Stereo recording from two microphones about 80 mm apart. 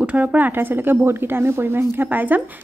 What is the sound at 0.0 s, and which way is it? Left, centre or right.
Speech, centre.